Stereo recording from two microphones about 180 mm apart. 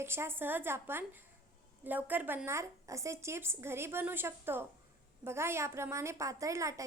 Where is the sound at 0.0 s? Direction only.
15° right (ahead or behind).